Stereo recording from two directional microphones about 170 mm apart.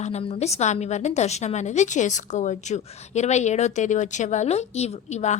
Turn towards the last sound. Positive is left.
turn(degrees=40)  # may be behind; listen again after turning